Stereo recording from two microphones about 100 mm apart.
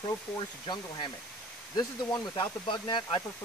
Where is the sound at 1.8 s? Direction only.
40° left (ahead or behind).